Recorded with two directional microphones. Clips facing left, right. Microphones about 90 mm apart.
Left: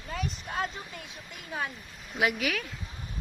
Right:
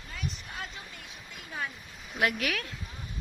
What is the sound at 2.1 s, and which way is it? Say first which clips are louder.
Speech: left 1 dB; centre (ahead or behind).